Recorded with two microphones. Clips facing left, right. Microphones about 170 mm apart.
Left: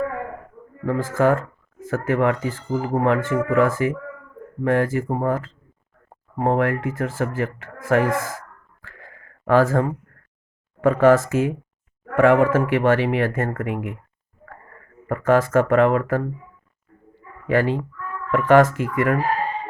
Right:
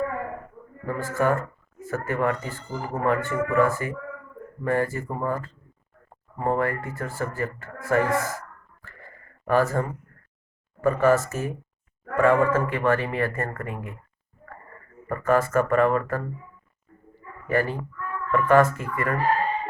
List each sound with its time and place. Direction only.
0.9 s speech: 90° left
15.1 s speech: 90° left
17.4 s speech: 90° left